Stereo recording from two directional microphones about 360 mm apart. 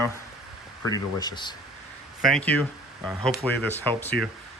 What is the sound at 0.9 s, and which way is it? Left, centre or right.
Speech, centre.